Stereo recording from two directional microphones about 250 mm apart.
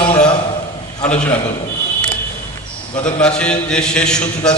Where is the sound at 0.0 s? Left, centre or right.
Centre.